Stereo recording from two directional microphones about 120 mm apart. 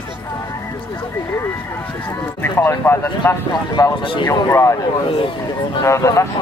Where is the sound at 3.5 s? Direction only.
30° left (ahead or behind).